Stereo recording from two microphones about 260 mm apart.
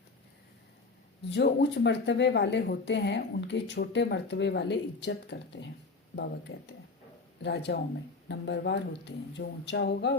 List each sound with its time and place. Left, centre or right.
1.3 s speech: left